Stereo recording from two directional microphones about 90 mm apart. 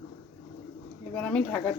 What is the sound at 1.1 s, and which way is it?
Speech, 15° left (ahead or behind).